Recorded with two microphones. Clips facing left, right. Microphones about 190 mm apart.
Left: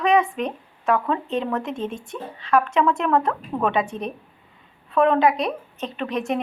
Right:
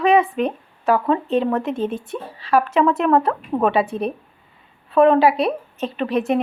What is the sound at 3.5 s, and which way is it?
Speech, 25° right (ahead or behind).